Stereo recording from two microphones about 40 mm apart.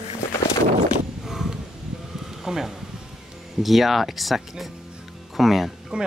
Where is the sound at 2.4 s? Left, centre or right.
Centre.